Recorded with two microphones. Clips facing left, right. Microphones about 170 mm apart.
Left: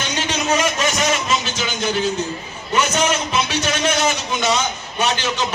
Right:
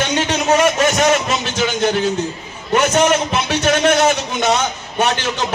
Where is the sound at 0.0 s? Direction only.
60° right (ahead or behind).